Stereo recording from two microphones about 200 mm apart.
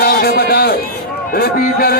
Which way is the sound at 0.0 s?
50° left (ahead or behind).